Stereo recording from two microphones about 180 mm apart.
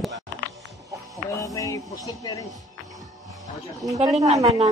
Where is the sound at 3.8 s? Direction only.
Centre (ahead or behind).